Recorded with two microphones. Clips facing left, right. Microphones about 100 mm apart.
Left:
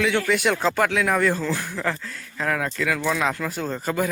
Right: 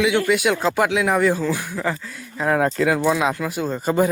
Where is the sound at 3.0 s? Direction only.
15° right (ahead or behind).